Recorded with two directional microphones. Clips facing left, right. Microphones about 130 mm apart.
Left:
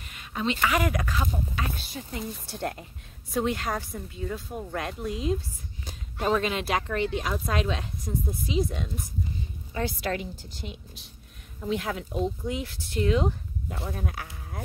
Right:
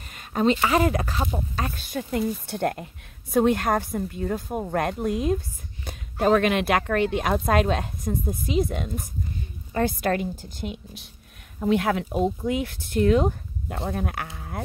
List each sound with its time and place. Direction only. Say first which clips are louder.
0.1 s speech: right 8 dB; 45° right (ahead or behind)
1.6 s a woman's voice: right 5 dB; 50° right (ahead or behind)
5.9 s a sound: right 6 dB; 55° right (ahead or behind)
6.4 s a woman's voice: right 6 dB; 65° right (ahead or behind)
11.6 s speech: right 7 dB; 65° right (ahead or behind)